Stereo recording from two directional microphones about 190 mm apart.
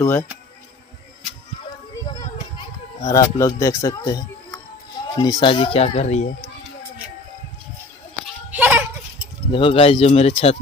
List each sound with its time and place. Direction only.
0.0 s speech: 15° left (ahead or behind)
3.1 s speech: 15° left (ahead or behind); by 6.3 s 35° left (ahead or behind)
8.5 s goat: 10° right (ahead or behind)
9.5 s speech: 30° left (ahead or behind)